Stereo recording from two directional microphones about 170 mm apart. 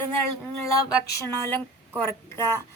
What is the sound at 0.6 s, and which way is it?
Speech, 20° left (ahead or behind).